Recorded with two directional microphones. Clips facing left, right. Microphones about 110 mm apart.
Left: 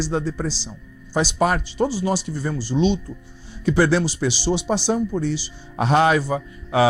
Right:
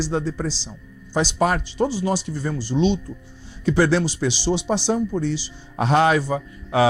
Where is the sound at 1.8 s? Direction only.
20° right (ahead or behind).